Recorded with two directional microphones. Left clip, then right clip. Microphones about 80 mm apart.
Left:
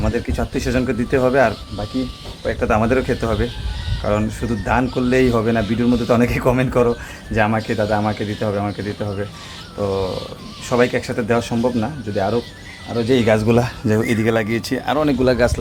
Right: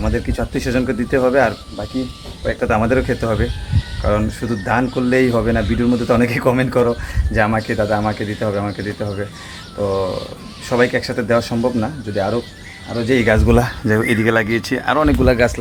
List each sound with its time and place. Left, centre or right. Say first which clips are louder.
0.0 s speech: right 1 dB; centre
10.7 s speech: right 1 dB; centre
13.1 s speech: right 1 dB; left
13.5 s speech: right 2 dB; centre
13.8 s speech: right 2 dB; centre